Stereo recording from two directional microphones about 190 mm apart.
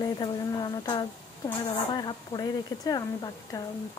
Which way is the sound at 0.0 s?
20° left (ahead or behind).